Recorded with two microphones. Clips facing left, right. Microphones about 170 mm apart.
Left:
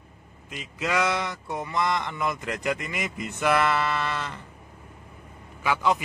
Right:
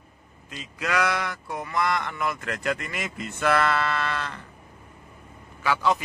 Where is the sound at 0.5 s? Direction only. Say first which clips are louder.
Left 1 dB; 20° left (ahead or behind).